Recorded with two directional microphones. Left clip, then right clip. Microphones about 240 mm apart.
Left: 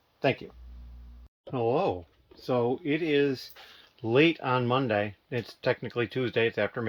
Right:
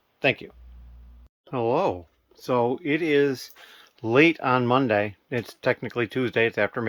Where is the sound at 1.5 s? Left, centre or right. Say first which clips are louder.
Right 3 dB; centre.